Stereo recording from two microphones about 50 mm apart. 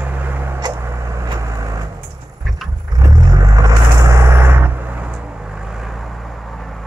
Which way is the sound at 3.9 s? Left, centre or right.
Right.